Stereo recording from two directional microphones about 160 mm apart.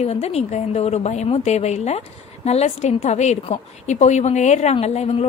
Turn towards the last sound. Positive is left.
turn(degrees=40)  # may be behind; listen again after turning